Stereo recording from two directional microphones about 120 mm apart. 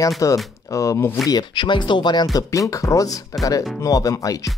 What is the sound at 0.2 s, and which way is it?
Speech, 25° left (ahead or behind).